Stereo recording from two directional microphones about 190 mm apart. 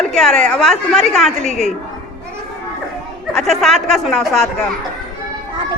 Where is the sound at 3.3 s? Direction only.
Centre (ahead or behind).